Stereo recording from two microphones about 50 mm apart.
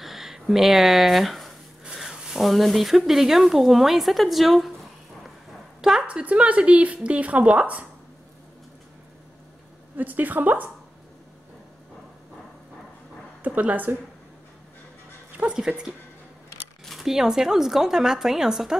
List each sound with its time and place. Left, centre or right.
0.0 s speech: centre
1.9 s a sound: centre
3.0 s a woman's voice: centre
5.8 s a sound: centre
6.0 s speech: right
9.9 s a woman's voice: right
13.4 s a woman's voice: right
15.3 s a woman's voice: right
17.0 s a woman's voice: centre